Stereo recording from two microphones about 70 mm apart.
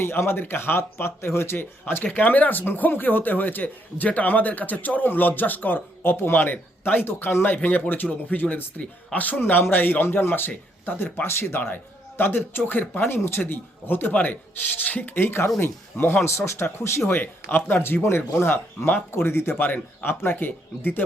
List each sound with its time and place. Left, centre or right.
0.0 s a man's voice: left
2.1 s a man's voice: left
14.1 s a man's voice: centre